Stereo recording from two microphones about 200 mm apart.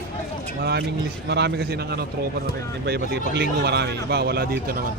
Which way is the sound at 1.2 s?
55° right (ahead or behind).